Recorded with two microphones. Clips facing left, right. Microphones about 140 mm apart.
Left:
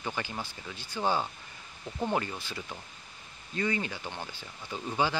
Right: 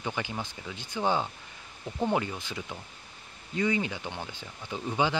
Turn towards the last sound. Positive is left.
turn(degrees=-15)  # may be behind; listen again after turning